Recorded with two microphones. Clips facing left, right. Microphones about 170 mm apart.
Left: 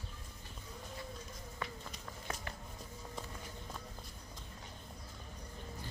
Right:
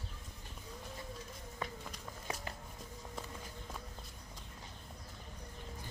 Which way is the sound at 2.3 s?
15° right (ahead or behind).